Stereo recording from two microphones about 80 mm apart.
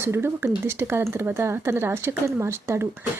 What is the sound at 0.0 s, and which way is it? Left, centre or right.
Speech, right.